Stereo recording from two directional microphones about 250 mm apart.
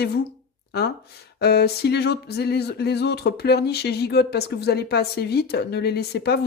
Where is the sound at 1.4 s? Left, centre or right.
Left.